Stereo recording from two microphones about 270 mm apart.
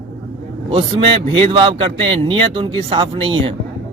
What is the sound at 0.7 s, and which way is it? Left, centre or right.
A man's voice, centre.